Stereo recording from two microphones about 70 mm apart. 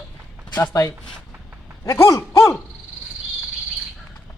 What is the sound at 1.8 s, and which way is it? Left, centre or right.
Speech, left.